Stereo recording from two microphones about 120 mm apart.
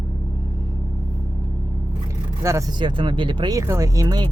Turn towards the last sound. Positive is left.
turn(degrees=-30)  # may be behind; listen again after turning